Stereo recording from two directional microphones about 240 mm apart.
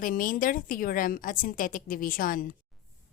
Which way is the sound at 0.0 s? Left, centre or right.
Left.